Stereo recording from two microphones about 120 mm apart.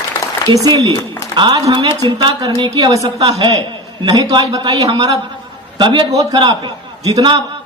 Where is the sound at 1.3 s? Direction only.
40° right (ahead or behind).